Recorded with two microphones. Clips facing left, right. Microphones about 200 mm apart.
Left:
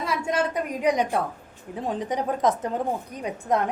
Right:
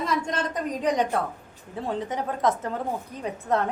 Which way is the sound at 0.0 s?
10° left (ahead or behind).